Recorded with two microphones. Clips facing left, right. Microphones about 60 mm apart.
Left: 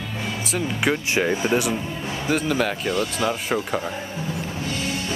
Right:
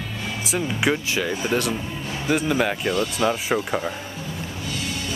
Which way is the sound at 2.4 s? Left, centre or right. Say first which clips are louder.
Right 1 dB; centre.